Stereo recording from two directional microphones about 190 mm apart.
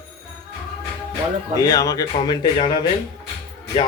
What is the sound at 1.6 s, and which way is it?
Speech, 20° left (ahead or behind).